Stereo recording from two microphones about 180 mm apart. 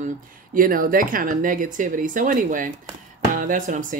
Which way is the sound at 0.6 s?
50° right (ahead or behind).